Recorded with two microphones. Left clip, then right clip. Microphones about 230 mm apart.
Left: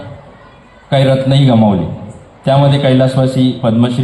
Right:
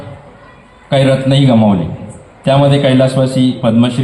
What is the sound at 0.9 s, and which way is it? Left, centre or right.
A man's voice, right.